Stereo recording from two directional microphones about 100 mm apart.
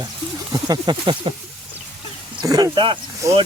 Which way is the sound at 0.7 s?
50° right (ahead or behind).